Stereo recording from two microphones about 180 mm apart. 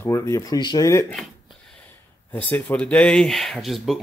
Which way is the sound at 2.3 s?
10° left (ahead or behind).